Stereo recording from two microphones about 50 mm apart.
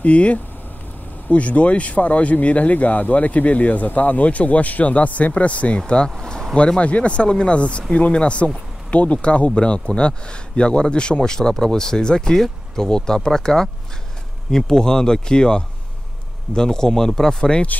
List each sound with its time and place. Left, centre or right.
0.0 s speech: left
5.8 s speech: centre